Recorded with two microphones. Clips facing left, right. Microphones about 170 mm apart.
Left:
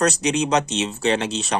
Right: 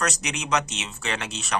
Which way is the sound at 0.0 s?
30° left (ahead or behind).